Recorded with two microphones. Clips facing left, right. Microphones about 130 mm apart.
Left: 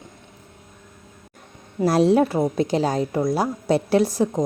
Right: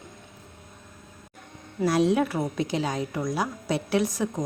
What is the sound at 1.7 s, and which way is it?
A woman's voice, 35° left (ahead or behind).